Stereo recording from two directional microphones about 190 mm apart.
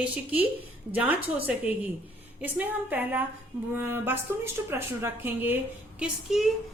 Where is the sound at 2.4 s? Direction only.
10° right (ahead or behind).